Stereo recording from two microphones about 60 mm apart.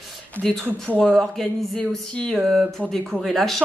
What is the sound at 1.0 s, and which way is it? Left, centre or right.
A woman's voice, centre.